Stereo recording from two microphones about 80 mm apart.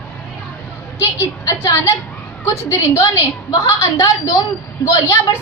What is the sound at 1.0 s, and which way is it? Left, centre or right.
A woman's voice, left.